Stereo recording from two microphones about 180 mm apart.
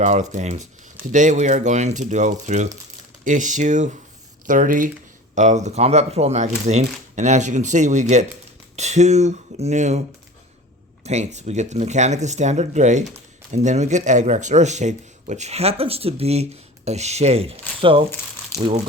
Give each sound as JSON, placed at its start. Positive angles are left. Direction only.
{"t": 0.0, "sound": "speech", "side_deg": -40}
{"t": 11.0, "sound": "speech", "side_deg": -40}